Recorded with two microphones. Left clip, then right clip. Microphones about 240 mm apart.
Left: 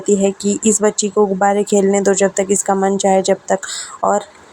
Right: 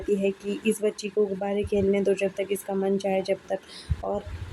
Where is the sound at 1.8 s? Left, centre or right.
Left.